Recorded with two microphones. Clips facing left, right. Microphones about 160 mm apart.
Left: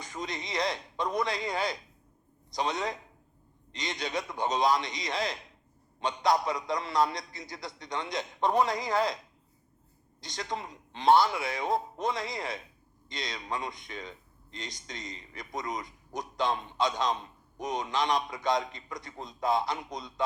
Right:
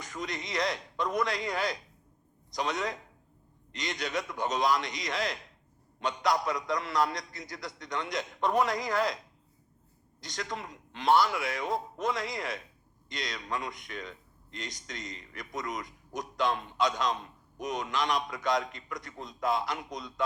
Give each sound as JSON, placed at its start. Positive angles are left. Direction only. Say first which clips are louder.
{"t": 0.0, "sound": "speech", "louder": "even", "side_deg": 30}
{"t": 10.2, "sound": "speech", "louder": "left 1 dB", "side_deg": 30}